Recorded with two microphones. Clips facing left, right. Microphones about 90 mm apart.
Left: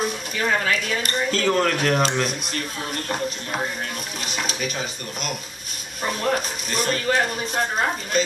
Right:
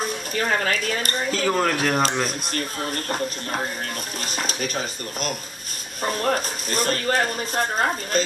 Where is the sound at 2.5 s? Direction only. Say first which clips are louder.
Right 1 dB; 40° right (ahead or behind).